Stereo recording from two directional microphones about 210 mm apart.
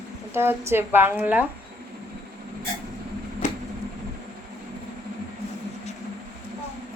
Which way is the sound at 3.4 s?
35° left (ahead or behind).